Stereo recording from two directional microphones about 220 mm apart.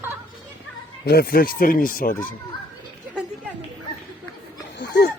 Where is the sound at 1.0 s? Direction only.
45° left (ahead or behind).